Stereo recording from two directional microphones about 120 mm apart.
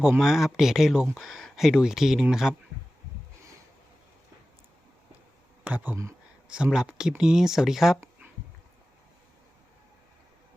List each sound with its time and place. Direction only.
0.0 s speech: 5° right (ahead or behind)
5.6 s speech: 15° right (ahead or behind)
6.5 s speech: 5° right (ahead or behind)